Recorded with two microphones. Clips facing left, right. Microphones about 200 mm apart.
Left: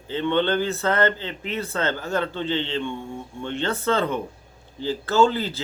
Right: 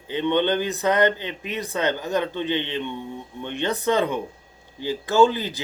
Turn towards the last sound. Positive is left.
turn(degrees=-15)  # may be behind; listen again after turning